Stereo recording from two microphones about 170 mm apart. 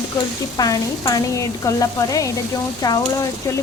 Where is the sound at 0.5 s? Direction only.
25° left (ahead or behind).